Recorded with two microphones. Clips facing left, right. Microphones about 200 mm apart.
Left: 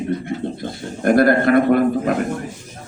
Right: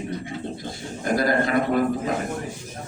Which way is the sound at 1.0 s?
60° left (ahead or behind).